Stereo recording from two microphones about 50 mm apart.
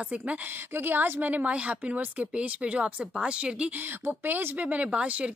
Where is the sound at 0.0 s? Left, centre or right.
Right.